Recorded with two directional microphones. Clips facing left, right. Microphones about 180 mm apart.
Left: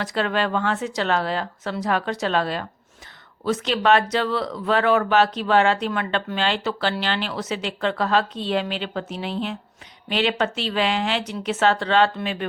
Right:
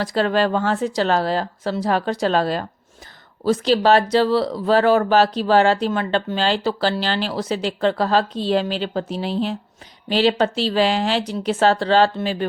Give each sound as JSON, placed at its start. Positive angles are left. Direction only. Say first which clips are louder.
{"t": 0.0, "sound": "speech", "louder": "right 5 dB", "side_deg": -35}